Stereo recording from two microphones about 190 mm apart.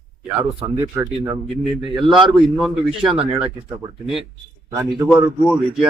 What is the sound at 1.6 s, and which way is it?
A man's voice, centre (ahead or behind).